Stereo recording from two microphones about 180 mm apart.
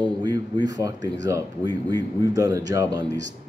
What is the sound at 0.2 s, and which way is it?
A man's voice, 25° right (ahead or behind).